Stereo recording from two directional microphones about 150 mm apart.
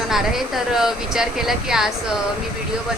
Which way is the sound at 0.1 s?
Centre (ahead or behind).